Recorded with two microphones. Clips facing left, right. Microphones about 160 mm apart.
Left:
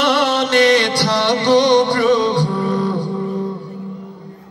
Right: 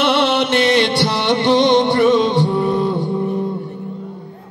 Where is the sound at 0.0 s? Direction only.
25° right (ahead or behind).